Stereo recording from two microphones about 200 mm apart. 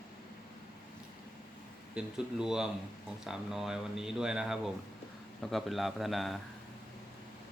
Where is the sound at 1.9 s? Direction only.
5° right (ahead or behind).